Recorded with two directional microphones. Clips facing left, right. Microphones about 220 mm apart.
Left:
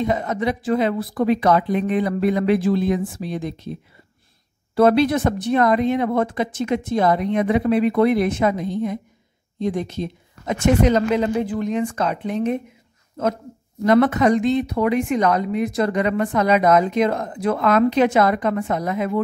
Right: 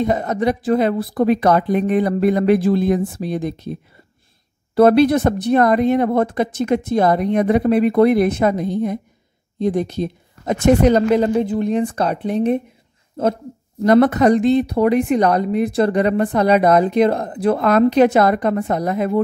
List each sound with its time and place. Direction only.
0.0 s a woman's voice: 40° right (ahead or behind)
4.7 s speech: 40° right (ahead or behind)
13.8 s speech: 40° right (ahead or behind)